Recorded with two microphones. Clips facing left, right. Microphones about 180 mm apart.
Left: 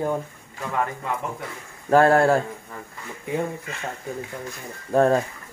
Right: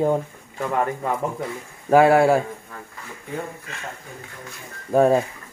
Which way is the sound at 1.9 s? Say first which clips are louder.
Right 2 dB; 10° right (ahead or behind).